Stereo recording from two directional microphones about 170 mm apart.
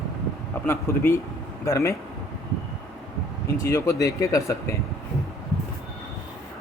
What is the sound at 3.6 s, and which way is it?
Speech, 20° left (ahead or behind).